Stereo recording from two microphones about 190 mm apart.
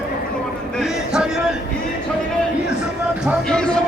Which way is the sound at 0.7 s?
Centre (ahead or behind).